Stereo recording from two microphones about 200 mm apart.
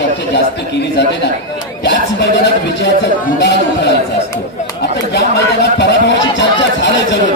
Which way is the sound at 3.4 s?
60° left (ahead or behind).